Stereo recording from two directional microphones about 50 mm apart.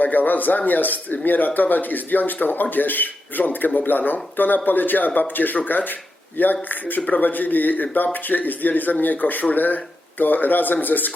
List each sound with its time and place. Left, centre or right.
0.0 s speech: left